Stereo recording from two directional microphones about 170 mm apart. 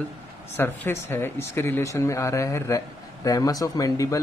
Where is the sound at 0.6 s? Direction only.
15° left (ahead or behind).